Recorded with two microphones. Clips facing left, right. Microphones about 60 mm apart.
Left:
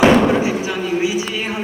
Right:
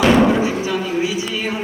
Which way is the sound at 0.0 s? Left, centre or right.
Left.